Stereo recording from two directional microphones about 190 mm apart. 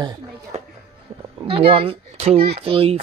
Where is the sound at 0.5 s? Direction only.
35° right (ahead or behind).